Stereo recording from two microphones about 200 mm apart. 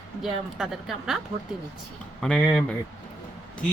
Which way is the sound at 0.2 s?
Centre (ahead or behind).